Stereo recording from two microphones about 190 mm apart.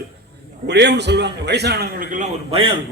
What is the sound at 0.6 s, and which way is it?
A man's voice, 65° right (ahead or behind).